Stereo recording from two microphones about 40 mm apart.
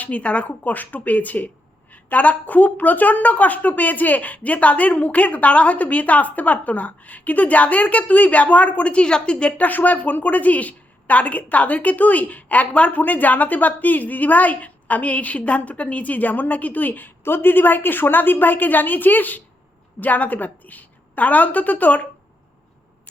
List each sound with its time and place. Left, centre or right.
0.0 s a woman's voice: left
9.6 s a woman's voice: left
17.2 s a woman's voice: left